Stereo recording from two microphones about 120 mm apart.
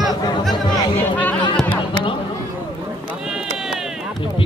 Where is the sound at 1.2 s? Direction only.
15° left (ahead or behind).